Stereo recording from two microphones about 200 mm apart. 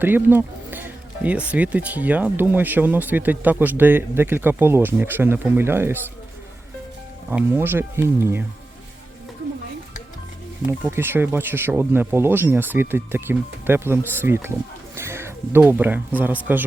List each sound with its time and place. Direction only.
0.0 s speech: 10° right (ahead or behind)
7.3 s speech: 10° right (ahead or behind)
10.7 s speech: 10° right (ahead or behind)